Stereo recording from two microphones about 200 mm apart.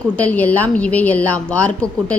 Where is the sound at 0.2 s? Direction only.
10° left (ahead or behind).